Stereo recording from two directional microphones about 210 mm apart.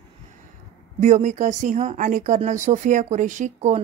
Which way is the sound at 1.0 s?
35° right (ahead or behind).